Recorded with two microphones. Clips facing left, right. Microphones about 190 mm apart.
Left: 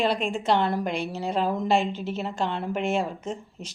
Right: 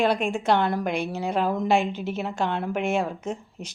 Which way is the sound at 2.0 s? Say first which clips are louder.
Right 1 dB; 60° right (ahead or behind).